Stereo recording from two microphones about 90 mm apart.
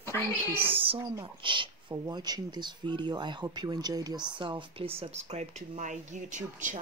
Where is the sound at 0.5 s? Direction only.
25° right (ahead or behind).